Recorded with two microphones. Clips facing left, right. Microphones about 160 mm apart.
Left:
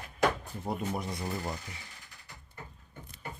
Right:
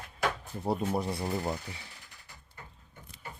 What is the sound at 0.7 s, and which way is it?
Speech, 30° right (ahead or behind).